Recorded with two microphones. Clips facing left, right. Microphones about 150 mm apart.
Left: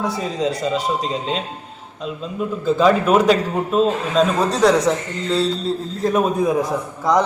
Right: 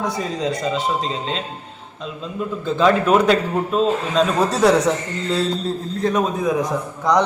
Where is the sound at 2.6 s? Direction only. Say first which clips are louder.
Left 1 dB; 5° left (ahead or behind).